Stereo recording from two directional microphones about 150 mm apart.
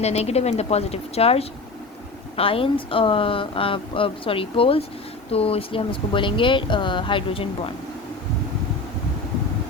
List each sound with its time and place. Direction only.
0.0 s a woman's voice: 45° left (ahead or behind)